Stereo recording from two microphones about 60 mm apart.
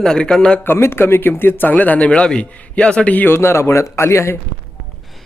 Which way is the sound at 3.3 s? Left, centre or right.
Left.